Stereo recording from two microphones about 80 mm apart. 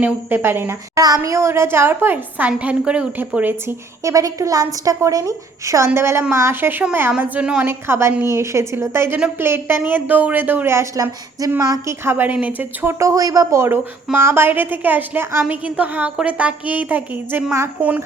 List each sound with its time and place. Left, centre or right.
0.0 s a woman's voice: right
0.9 s a woman's voice: right
4.0 s a woman's voice: right; by 7.7 s centre
7.7 s a woman's voice: right
10.9 s a woman's voice: right
11.9 s a woman's voice: right
13.6 s a woman's voice: right